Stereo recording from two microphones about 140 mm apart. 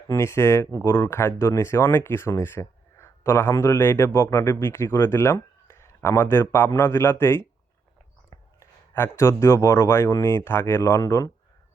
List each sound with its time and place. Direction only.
0.1 s speech: 20° left (ahead or behind)